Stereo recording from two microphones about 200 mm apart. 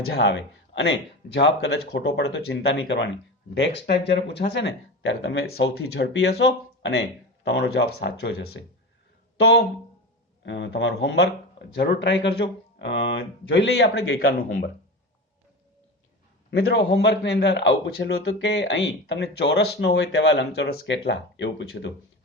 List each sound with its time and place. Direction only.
0.1 s a man's voice: 60° left (ahead or behind)
7.4 s a man's voice: 60° left (ahead or behind); by 14.3 s 80° left
16.5 s a man's voice: 55° left (ahead or behind)